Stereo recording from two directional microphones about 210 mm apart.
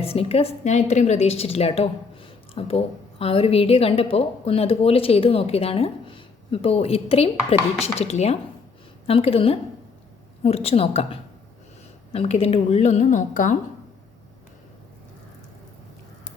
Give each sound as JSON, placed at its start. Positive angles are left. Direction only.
{"t": 0.0, "sound": "a woman's voice", "side_deg": 25}